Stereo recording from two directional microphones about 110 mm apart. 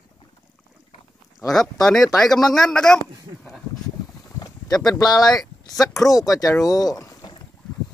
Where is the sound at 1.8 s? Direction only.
5° left (ahead or behind).